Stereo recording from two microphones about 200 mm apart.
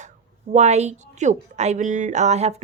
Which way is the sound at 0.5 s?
35° right (ahead or behind).